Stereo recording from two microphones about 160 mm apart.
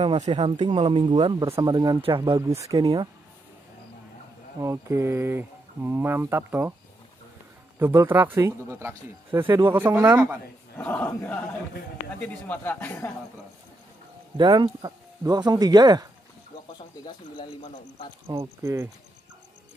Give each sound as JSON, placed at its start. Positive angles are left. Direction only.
{"t": 0.0, "sound": "speech", "side_deg": -30}
{"t": 2.2, "sound": "speech", "side_deg": -20}
{"t": 4.6, "sound": "speech", "side_deg": -20}
{"t": 7.8, "sound": "speech", "side_deg": -15}
{"t": 10.8, "sound": "speech", "side_deg": 10}
{"t": 14.3, "sound": "speech", "side_deg": -30}
{"t": 18.6, "sound": "speech", "side_deg": -20}